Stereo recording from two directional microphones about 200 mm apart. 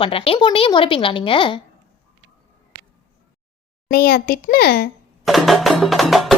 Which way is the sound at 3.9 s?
50° left (ahead or behind).